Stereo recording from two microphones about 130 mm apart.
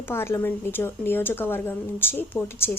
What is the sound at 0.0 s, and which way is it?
A woman's voice, 20° left (ahead or behind).